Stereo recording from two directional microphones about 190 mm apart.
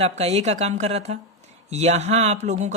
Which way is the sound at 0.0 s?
35° right (ahead or behind).